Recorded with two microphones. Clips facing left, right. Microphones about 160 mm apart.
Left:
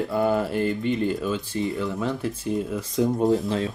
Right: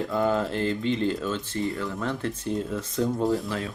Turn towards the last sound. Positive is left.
turn(degrees=25)  # may be behind; listen again after turning